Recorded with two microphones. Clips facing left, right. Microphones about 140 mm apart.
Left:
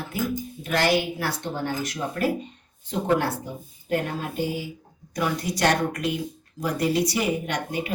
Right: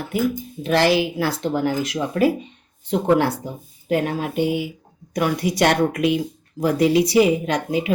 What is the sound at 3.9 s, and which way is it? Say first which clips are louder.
Speech: right 5 dB; 90° right.